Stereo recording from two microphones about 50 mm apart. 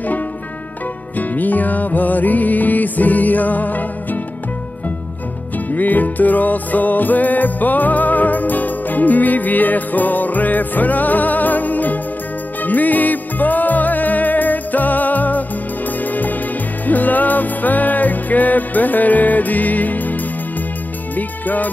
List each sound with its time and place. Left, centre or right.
1.1 s music: left
5.7 s music: left